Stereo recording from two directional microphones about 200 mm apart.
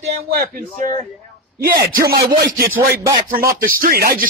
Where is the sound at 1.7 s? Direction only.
15° right (ahead or behind).